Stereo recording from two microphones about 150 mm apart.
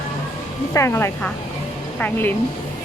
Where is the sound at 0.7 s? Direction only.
15° left (ahead or behind).